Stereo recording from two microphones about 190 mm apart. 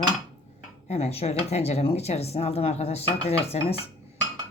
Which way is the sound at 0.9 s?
35° left (ahead or behind).